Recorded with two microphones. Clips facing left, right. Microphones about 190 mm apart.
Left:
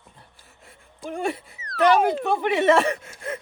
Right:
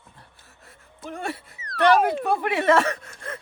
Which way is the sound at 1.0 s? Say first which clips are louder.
Left 4 dB; centre (ahead or behind).